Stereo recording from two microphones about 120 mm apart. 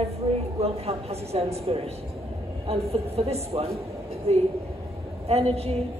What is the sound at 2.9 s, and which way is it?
A woman's voice, 55° right (ahead or behind).